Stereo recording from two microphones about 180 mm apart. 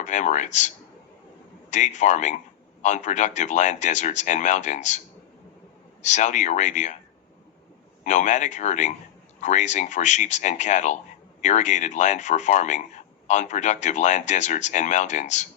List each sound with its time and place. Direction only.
0.0 s speech: 40° left (ahead or behind)
1.7 s speech: 40° left (ahead or behind)
8.0 s speech: 40° left (ahead or behind)